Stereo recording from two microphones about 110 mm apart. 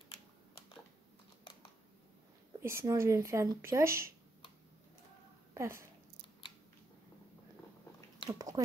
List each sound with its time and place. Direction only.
2.6 s speech: 25° right (ahead or behind)
5.5 s speech: 25° right (ahead or behind)
8.3 s a sound: 35° right (ahead or behind)